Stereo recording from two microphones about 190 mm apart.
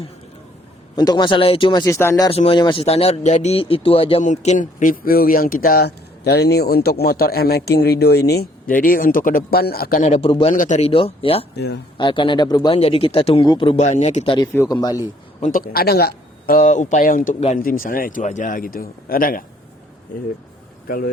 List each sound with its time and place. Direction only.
0.9 s speech: 20° left (ahead or behind)
2.3 s speech: 30° left (ahead or behind)
10.2 s speech: 25° left (ahead or behind)
10.5 s a man's voice: 40° left (ahead or behind)
11.5 s speech: 60° left (ahead or behind)
11.9 s speech: 25° left (ahead or behind)
13.8 s a man's voice: 40° left (ahead or behind)
14.3 s speech: 15° left (ahead or behind)
15.4 s speech: 45° left (ahead or behind)
20.8 s speech: 50° left (ahead or behind)